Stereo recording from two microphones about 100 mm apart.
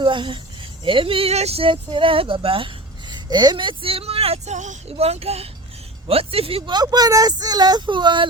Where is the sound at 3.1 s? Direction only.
45° right (ahead or behind); by 5.5 s 85° right.